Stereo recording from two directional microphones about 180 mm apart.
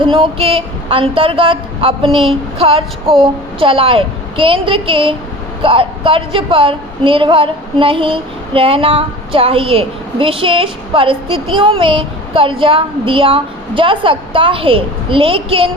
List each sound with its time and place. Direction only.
0.0 s a woman's voice: 30° right (ahead or behind)